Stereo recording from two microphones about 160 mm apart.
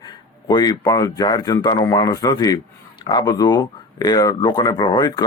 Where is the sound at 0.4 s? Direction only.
25° left (ahead or behind).